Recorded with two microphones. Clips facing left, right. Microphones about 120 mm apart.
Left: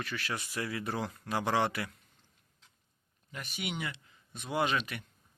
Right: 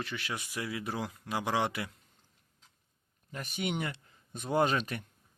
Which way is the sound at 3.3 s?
40° right (ahead or behind).